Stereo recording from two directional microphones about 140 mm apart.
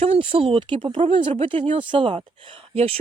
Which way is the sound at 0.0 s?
45° right (ahead or behind).